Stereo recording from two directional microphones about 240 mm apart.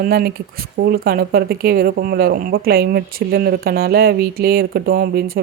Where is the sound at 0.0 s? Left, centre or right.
Right.